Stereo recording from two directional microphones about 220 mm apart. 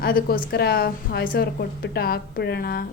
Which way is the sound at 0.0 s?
40° left (ahead or behind).